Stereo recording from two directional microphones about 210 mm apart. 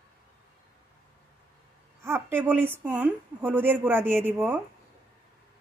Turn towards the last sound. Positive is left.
turn(degrees=-10)  # may be behind; listen again after turning